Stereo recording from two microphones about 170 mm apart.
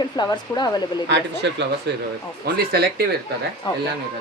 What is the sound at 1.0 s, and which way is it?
Speech, 90° right.